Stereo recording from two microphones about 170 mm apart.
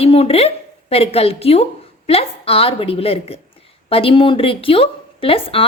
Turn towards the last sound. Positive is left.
turn(degrees=35)  # may be behind; listen again after turning